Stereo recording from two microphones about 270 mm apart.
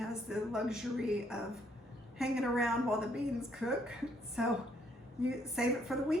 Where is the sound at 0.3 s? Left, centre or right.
Centre.